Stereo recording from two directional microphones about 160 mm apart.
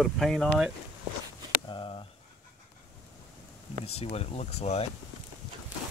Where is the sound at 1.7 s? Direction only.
30° left (ahead or behind).